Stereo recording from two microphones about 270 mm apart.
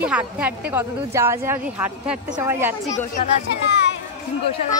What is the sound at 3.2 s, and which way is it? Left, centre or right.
Speech, left.